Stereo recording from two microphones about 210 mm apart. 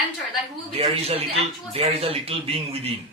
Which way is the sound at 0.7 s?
25° right (ahead or behind).